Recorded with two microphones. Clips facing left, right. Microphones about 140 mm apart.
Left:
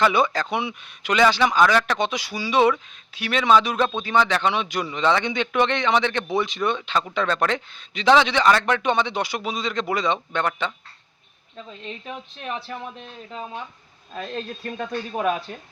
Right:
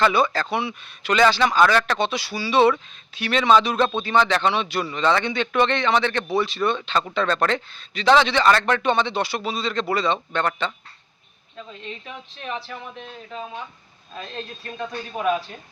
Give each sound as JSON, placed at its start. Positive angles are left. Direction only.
{"t": 0.1, "sound": "a man's voice", "side_deg": 20}